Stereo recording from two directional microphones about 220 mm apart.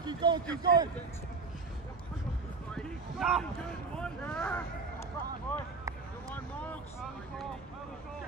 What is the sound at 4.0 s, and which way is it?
Speech, 5° left (ahead or behind).